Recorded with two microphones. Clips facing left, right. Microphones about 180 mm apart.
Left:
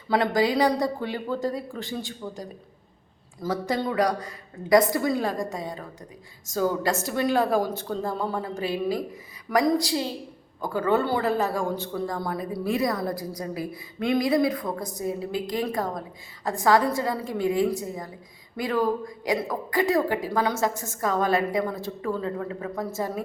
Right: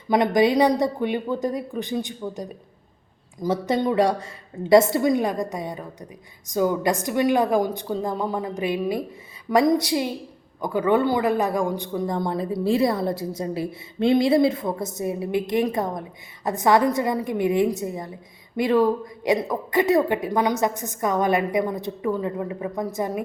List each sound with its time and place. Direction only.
0.1 s a woman's voice: 20° right (ahead or behind)